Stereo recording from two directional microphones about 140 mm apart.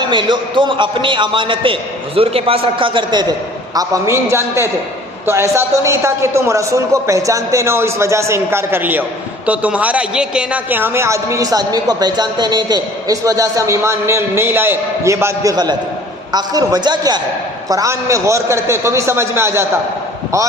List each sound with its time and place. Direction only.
0.0 s a man's voice: 35° right (ahead or behind)
3.8 s a man's voice: 20° right (ahead or behind)